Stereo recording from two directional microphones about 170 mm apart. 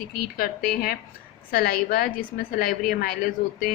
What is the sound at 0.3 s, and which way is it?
Speech, 60° left (ahead or behind).